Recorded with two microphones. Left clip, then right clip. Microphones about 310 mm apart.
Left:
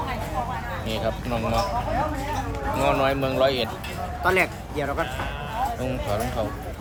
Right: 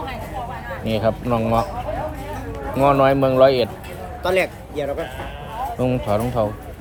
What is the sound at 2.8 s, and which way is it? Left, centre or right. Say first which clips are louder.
Speech: right 8 dB; right.